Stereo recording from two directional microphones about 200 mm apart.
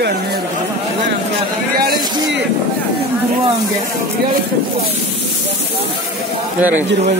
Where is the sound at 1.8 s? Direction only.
50° right (ahead or behind).